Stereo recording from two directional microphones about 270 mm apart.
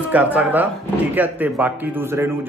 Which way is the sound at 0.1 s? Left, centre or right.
Centre.